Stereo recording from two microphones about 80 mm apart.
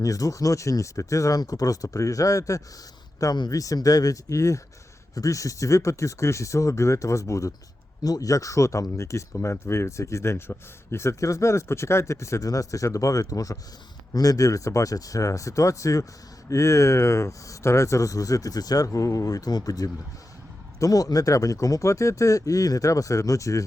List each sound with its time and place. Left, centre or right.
0.0 s speech: left